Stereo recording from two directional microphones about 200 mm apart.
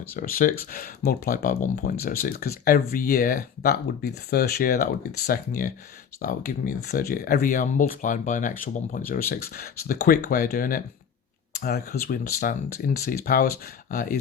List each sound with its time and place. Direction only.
0.1 s speech: 45° left (ahead or behind)